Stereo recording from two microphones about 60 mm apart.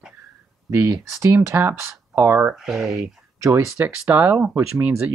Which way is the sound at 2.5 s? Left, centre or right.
Centre.